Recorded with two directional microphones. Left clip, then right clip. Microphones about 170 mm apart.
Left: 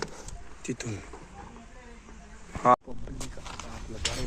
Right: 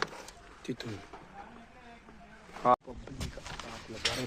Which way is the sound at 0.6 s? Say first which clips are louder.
Left 4 dB; 10° right (ahead or behind).